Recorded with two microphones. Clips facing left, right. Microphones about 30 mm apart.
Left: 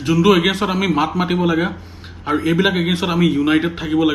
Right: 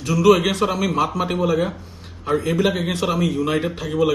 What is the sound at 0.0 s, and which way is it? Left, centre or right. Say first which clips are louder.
A man's voice: left 2 dB; left.